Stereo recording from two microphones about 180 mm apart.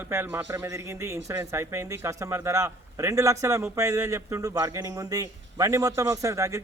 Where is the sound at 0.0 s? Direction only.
10° right (ahead or behind).